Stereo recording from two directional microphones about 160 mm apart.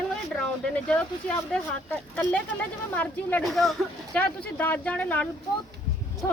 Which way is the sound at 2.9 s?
10° left (ahead or behind).